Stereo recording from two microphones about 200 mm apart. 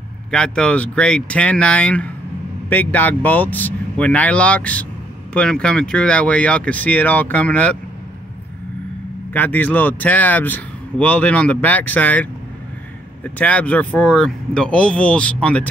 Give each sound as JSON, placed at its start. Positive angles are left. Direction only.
{"t": 0.3, "sound": "speech", "side_deg": 5}
{"t": 9.3, "sound": "speech", "side_deg": 10}